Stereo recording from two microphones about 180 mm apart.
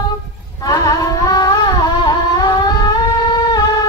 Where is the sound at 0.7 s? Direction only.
20° left (ahead or behind).